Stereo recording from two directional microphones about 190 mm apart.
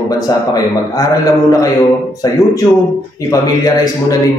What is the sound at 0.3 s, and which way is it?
A man's voice, 20° left (ahead or behind).